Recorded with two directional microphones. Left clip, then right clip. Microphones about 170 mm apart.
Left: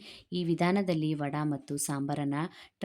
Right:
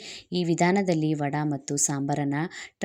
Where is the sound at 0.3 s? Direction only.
20° right (ahead or behind).